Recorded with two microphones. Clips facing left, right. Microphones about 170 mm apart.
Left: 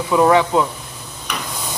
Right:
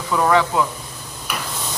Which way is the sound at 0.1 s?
20° left (ahead or behind).